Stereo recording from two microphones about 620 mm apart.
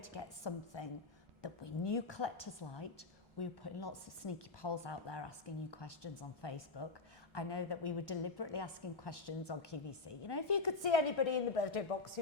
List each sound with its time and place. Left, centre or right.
0.0 s a woman's voice: left